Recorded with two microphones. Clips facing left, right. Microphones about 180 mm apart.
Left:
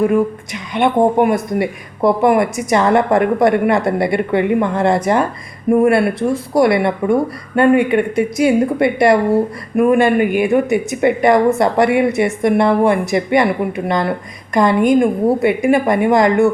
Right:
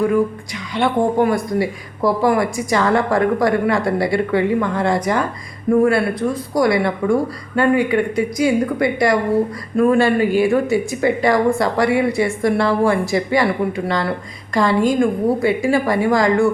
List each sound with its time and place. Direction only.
0.1 s speech: 20° left (ahead or behind)